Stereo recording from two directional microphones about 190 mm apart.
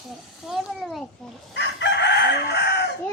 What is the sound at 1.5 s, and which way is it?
Chicken, 65° left (ahead or behind).